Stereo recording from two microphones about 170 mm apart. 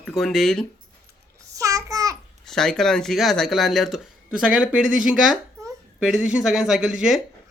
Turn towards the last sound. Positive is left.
turn(degrees=-5)  # may be behind; listen again after turning